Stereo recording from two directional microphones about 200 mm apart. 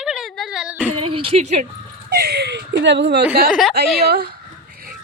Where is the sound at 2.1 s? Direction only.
55° right (ahead or behind).